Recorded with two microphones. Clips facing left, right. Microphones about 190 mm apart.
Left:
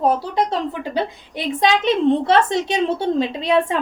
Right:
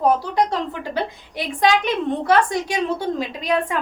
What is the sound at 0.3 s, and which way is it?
A woman's voice, 20° left (ahead or behind).